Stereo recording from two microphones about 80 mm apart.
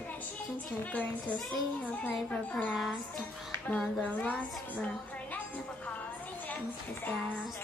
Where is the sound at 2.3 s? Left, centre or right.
Centre.